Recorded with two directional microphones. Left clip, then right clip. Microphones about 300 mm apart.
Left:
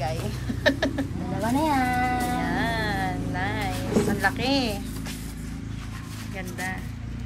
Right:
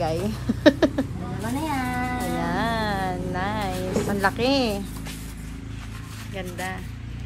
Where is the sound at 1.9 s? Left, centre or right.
Centre.